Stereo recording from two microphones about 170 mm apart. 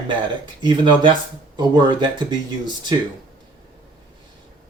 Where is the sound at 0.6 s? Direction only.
25° right (ahead or behind).